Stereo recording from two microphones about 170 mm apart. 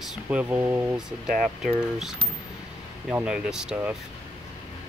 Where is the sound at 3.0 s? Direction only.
5° right (ahead or behind).